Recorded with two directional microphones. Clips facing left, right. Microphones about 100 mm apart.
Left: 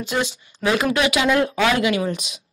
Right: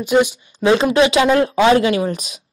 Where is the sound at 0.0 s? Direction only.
15° right (ahead or behind).